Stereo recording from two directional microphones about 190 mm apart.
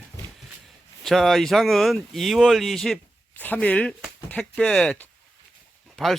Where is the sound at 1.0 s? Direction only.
Centre (ahead or behind).